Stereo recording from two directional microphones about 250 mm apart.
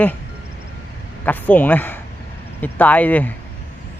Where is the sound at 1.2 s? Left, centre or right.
Centre.